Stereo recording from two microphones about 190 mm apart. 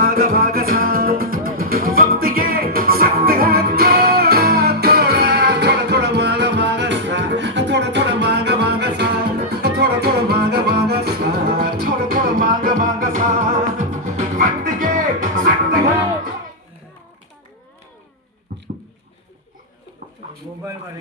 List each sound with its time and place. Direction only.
0.0 s music: 50° right (ahead or behind)